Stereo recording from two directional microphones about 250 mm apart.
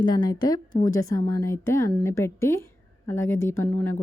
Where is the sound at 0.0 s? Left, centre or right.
Centre.